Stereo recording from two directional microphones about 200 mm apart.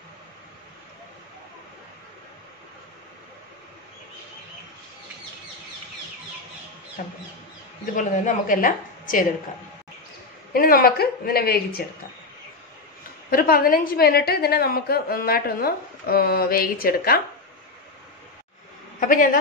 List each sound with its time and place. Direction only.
7.0 s a woman's voice: 45° left (ahead or behind)
10.5 s a woman's voice: 45° left (ahead or behind)
13.3 s a woman's voice: 50° left (ahead or behind)
18.9 s a woman's voice: 45° left (ahead or behind)